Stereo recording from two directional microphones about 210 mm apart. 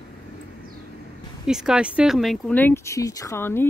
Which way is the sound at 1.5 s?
5° right (ahead or behind).